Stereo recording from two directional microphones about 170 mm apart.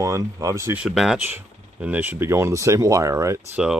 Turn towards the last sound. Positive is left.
turn(degrees=-15)  # may be behind; listen again after turning